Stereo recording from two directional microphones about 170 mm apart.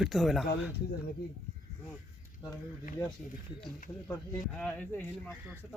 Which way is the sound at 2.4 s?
25° left (ahead or behind).